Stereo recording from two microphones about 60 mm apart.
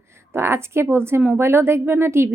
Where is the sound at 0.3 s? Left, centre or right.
Right.